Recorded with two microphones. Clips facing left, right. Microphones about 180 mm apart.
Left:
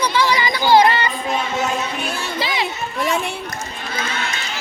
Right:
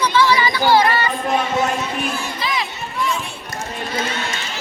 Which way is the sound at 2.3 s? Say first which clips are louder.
Left 2 dB; 30° left (ahead or behind).